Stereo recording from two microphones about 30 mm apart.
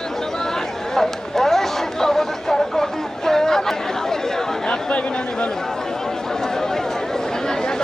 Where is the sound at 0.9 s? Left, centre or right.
Centre.